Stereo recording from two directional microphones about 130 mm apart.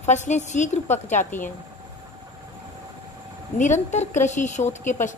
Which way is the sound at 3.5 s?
70° left (ahead or behind).